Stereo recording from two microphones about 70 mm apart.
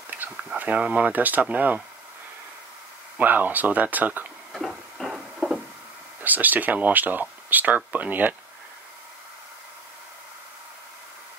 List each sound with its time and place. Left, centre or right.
0.6 s speech: centre
3.2 s speech: right
4.5 s a sound: centre
6.2 s speech: right